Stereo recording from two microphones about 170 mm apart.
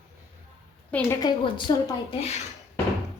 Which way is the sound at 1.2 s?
30° left (ahead or behind).